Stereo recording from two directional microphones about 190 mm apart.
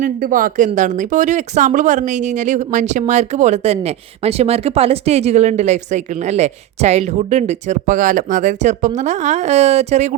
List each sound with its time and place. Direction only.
0.0 s speech: 45° right (ahead or behind)